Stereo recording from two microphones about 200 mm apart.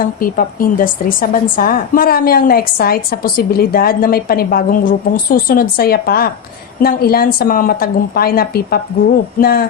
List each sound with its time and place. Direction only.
0.0 s a woman's voice: 45° left (ahead or behind)